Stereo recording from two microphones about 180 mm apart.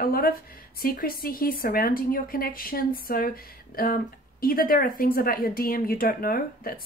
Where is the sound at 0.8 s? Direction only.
55° left (ahead or behind).